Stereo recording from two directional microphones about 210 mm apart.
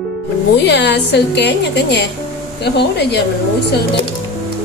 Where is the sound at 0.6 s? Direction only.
55° left (ahead or behind).